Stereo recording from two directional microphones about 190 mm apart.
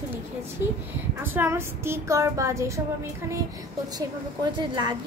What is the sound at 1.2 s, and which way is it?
Speech, 10° right (ahead or behind).